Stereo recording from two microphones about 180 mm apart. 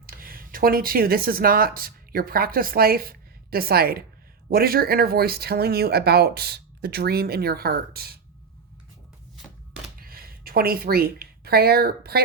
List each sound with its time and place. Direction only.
0.0 s speech: 55° right (ahead or behind)
10.0 s speech: 55° right (ahead or behind)